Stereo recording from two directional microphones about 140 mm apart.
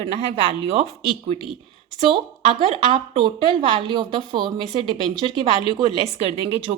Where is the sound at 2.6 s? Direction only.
45° right (ahead or behind).